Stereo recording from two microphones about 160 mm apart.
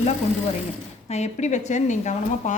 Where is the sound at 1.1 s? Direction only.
45° left (ahead or behind).